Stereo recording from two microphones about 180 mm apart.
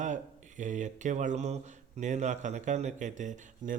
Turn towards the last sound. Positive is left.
turn(degrees=-45)  # may be behind; listen again after turning